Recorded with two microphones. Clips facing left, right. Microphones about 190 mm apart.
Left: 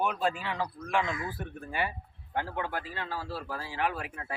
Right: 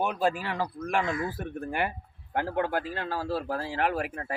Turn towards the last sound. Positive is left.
turn(degrees=-50)  # may be behind; listen again after turning